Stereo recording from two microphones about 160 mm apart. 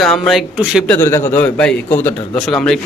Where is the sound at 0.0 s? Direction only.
Centre (ahead or behind).